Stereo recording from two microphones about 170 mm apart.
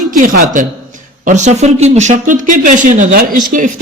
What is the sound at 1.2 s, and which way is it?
Speech, 45° right (ahead or behind).